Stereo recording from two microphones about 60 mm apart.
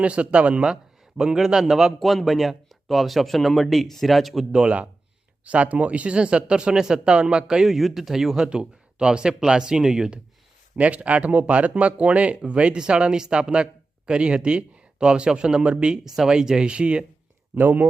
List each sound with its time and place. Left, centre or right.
0.0 s a man's voice: right; by 4.4 s centre
4.5 s speech: centre
8.4 s speech: centre
10.8 s speech: right
17.5 s speech: right